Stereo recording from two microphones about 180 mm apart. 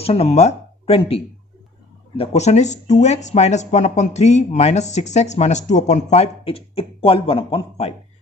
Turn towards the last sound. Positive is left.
turn(degrees=30)  # may be behind; listen again after turning